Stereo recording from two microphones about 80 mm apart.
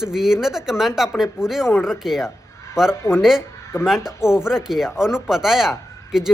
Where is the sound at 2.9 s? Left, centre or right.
Left.